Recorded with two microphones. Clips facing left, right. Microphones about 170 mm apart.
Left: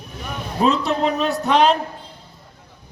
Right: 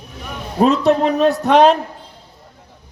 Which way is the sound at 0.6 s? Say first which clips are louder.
Right 5 dB; 50° right (ahead or behind).